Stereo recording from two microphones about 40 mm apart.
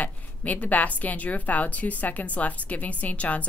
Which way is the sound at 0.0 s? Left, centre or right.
Left.